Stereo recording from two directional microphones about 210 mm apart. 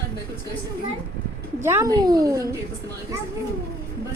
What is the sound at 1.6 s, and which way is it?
Speech, 15° right (ahead or behind).